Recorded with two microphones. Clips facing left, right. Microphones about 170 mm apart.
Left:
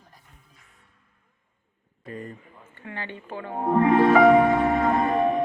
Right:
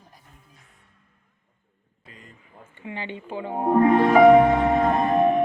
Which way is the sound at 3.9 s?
Centre (ahead or behind).